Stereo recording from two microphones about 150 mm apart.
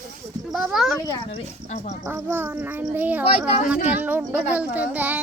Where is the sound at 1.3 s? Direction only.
40° left (ahead or behind).